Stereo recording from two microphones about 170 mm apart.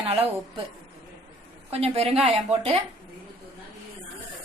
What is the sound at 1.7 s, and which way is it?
A woman's voice, 35° right (ahead or behind).